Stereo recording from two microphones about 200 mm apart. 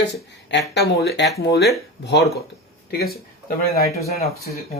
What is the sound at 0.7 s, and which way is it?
Speech, 55° left (ahead or behind).